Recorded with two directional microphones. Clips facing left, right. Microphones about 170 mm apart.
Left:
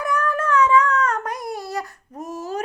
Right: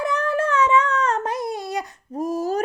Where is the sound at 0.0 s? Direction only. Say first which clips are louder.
Right 1 dB; 25° right (ahead or behind).